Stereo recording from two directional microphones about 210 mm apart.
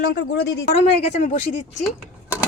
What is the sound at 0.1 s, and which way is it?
Speech, 55° left (ahead or behind).